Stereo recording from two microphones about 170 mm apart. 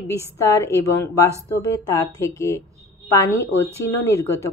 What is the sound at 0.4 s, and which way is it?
Speech, 15° left (ahead or behind).